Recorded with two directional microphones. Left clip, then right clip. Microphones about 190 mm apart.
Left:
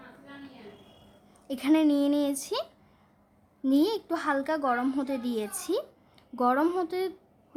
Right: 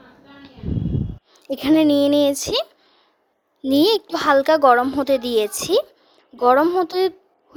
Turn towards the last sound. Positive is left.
turn(degrees=-25)  # may be behind; listen again after turning